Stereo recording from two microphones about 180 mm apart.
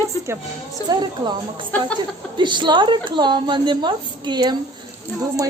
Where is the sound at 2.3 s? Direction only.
25° right (ahead or behind).